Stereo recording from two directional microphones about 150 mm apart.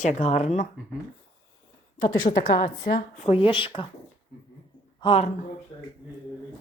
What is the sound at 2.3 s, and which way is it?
Speech, 50° left (ahead or behind).